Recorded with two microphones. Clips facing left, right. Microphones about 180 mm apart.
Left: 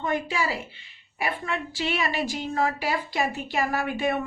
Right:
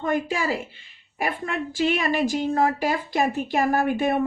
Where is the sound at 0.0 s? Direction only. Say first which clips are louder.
Right 3 dB; 50° right (ahead or behind).